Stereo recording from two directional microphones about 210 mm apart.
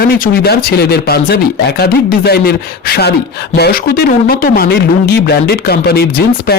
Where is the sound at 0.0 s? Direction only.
50° left (ahead or behind).